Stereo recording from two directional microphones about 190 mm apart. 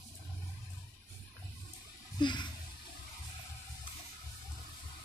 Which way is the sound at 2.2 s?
25° left (ahead or behind).